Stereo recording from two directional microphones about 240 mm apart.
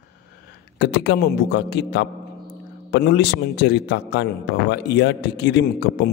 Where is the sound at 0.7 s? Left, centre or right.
Left.